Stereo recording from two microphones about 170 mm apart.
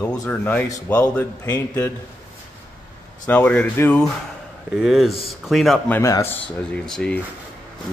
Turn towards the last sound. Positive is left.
turn(degrees=5)  # may be behind; listen again after turning